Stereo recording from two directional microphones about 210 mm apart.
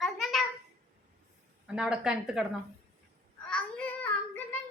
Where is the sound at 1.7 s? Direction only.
5° right (ahead or behind).